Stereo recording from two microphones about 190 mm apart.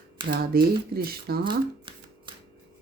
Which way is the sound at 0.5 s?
55° right (ahead or behind).